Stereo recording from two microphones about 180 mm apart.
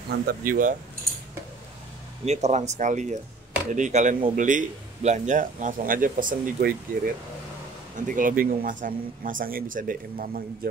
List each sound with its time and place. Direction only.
0.3 s speech: 50° right (ahead or behind)
2.2 s speech: 40° right (ahead or behind)
8.1 s speech: 50° right (ahead or behind)